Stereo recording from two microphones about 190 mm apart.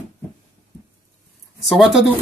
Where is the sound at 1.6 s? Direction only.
Centre (ahead or behind).